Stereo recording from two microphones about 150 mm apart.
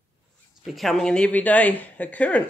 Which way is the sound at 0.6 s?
Centre (ahead or behind).